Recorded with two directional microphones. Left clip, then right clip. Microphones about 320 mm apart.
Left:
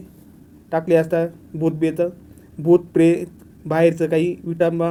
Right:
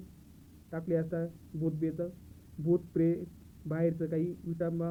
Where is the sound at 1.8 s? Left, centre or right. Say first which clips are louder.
Left 15 dB; left.